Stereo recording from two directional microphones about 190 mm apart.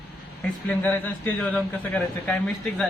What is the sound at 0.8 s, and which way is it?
A man's voice, 10° left (ahead or behind).